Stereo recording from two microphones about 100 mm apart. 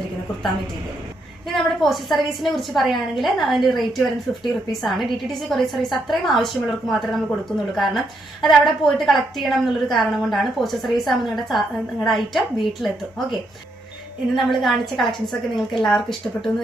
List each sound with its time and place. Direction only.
1.5 s a woman's voice: centre (ahead or behind)